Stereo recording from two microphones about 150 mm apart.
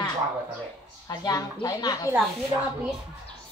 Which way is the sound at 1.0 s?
25° left (ahead or behind).